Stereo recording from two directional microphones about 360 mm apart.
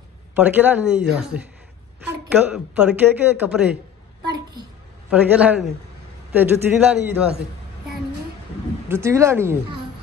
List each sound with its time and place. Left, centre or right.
0.3 s speech: centre
2.4 s speech: centre
5.1 s speech: centre
8.8 s a woman's voice: centre